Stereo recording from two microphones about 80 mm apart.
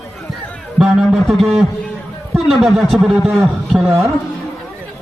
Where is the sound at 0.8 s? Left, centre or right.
Centre.